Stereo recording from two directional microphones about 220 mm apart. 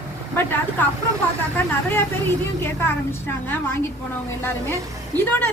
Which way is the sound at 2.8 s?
10° left (ahead or behind).